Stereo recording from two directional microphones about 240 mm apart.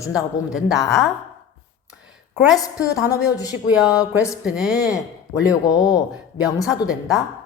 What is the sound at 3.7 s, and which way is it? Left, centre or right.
Speech, centre.